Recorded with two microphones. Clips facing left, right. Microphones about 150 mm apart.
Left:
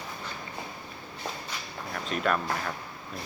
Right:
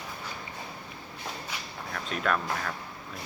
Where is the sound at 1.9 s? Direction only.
5° left (ahead or behind).